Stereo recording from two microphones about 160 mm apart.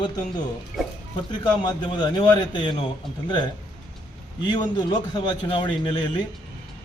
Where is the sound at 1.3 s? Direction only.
25° left (ahead or behind).